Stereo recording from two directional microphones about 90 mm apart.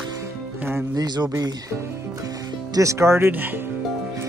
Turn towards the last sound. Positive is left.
turn(degrees=-30)  # may be behind; listen again after turning